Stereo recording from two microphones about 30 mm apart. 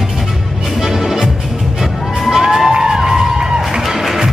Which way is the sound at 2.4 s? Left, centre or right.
Centre.